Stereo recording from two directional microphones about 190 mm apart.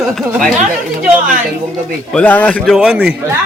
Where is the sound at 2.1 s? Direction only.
5° left (ahead or behind).